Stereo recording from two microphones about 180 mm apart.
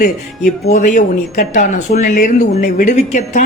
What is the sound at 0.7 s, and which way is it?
Speech, 45° left (ahead or behind).